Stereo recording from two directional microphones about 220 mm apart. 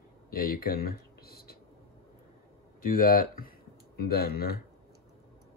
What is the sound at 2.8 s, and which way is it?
Speech, 40° left (ahead or behind).